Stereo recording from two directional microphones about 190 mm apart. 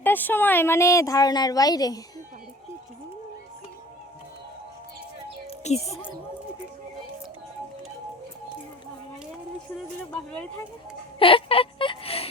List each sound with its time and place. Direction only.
0.0 s speech: 10° left (ahead or behind)
5.5 s music: 35° left (ahead or behind)
11.2 s a sound: 30° left (ahead or behind)